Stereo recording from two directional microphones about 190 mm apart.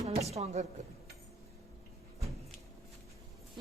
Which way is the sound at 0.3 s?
35° right (ahead or behind).